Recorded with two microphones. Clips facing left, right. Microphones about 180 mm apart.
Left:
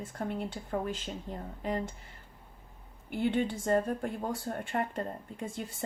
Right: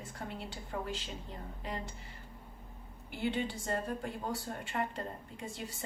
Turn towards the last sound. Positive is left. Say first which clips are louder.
# left 5 dB
turn(degrees=50)  # may be behind; listen again after turning